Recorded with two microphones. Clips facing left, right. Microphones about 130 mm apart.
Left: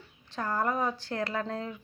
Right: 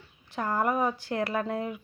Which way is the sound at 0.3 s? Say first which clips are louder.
Right 3 dB; 15° right (ahead or behind).